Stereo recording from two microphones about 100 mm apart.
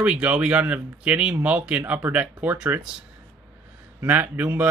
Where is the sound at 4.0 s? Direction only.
20° right (ahead or behind).